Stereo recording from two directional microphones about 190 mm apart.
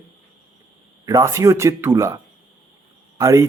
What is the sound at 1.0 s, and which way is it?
Speech, 15° right (ahead or behind).